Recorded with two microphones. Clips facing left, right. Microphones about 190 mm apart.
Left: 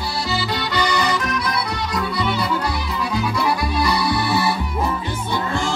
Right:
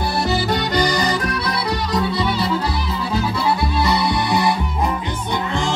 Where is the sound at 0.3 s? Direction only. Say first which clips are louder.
Right 2 dB; 45° right (ahead or behind).